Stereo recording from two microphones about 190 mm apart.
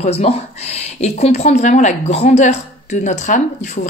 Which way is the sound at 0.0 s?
35° left (ahead or behind).